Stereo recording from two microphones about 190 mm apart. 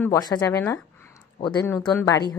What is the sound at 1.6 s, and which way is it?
Speech, 15° left (ahead or behind).